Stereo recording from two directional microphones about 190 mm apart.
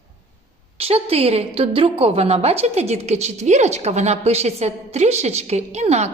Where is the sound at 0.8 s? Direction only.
30° right (ahead or behind).